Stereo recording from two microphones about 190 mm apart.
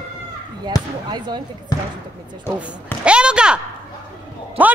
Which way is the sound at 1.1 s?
20° right (ahead or behind).